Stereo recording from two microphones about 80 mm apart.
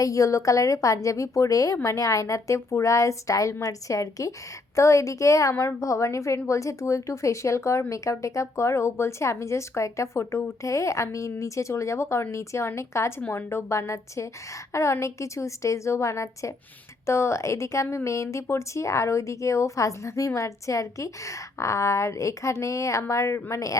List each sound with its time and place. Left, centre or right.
0.0 s speech: left